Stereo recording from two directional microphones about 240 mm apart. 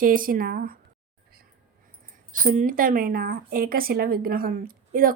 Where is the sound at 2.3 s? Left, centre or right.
Right.